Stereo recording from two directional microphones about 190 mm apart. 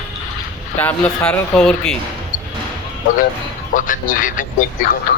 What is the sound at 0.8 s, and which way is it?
Speech, 5° left (ahead or behind).